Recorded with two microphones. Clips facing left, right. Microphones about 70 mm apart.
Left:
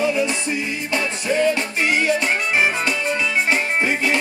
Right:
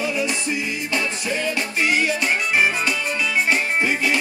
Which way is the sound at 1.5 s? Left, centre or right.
Left.